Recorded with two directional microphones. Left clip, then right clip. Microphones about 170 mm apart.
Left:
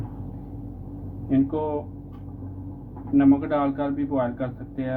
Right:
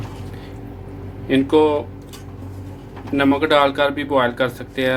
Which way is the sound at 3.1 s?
55° right (ahead or behind).